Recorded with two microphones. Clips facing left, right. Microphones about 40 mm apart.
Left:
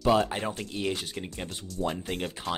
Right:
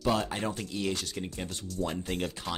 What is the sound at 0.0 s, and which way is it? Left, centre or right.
Speech, centre.